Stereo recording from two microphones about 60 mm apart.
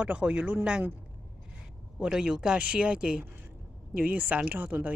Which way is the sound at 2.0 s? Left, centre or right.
Centre.